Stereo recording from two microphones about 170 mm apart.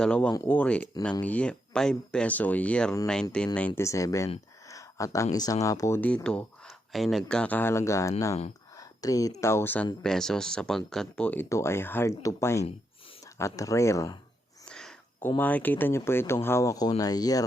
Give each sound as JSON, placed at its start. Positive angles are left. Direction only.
{"t": 0.0, "sound": "speech", "side_deg": 5}
{"t": 3.8, "sound": "speech", "side_deg": 20}
{"t": 14.6, "sound": "a sound", "side_deg": 5}
{"t": 15.4, "sound": "speech", "side_deg": 10}